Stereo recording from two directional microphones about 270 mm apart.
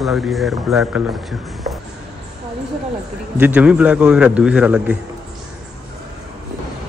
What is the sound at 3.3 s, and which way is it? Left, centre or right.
Speech, centre.